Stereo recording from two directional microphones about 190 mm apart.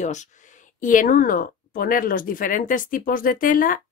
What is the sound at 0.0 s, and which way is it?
Speech, 40° left (ahead or behind).